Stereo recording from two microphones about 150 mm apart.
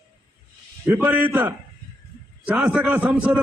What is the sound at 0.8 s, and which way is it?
A man's voice, 15° right (ahead or behind).